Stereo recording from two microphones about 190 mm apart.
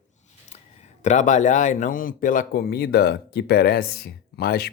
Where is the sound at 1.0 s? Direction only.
40° left (ahead or behind).